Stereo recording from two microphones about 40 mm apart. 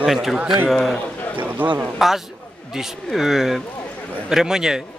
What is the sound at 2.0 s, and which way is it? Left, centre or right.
A man's voice, centre.